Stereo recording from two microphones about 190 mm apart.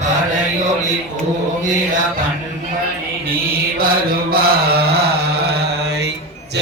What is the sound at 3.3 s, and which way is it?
Mantra, 50° right (ahead or behind).